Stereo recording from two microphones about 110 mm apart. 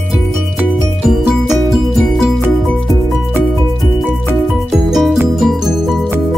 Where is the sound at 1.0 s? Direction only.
Centre (ahead or behind).